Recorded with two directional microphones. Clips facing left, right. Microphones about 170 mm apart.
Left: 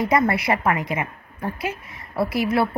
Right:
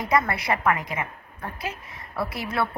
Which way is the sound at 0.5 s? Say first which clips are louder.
Left 3 dB; 25° left (ahead or behind).